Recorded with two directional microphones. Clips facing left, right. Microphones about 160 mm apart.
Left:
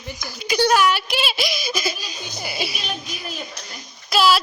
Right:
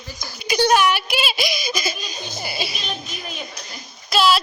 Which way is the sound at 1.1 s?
Centre (ahead or behind).